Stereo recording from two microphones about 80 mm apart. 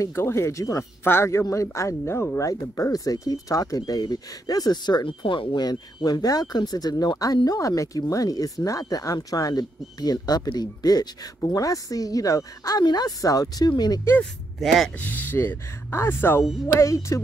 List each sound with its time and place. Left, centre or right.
0.0 s speech: left
14.6 s speech: centre
15.0 s speech: left
16.6 s speech: left